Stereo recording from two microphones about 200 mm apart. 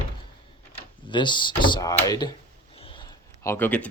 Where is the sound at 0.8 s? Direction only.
25° left (ahead or behind).